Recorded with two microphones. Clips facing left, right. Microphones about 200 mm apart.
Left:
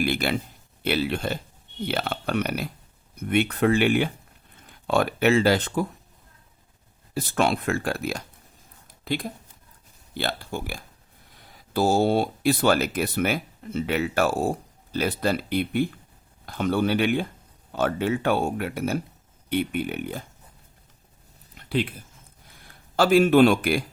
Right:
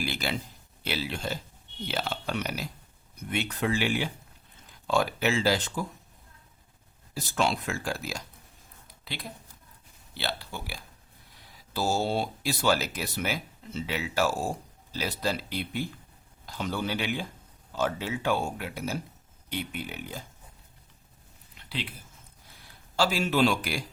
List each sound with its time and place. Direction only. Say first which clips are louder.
0.0 s speech: left 7 dB; 55° left (ahead or behind)
7.1 s speech: left 5 dB; 60° left (ahead or behind)
9.0 s speech: left 11 dB; 50° left (ahead or behind)
21.7 s speech: left 11 dB; 50° left (ahead or behind)
23.0 s speech: left 9 dB; 55° left (ahead or behind)